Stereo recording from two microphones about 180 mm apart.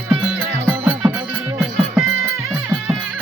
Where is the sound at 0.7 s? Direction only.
10° right (ahead or behind).